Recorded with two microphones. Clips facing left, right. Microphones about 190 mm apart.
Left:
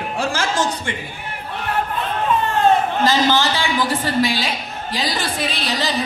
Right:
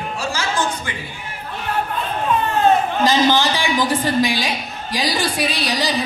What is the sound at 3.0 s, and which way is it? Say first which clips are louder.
A woman's voice: right 1 dB; 15° right (ahead or behind).